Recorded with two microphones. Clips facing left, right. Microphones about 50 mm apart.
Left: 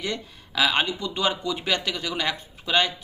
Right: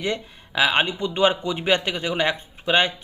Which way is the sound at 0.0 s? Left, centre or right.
Right.